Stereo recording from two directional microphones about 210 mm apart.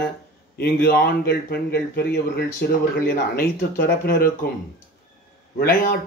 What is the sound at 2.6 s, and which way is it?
Speech, 45° left (ahead or behind).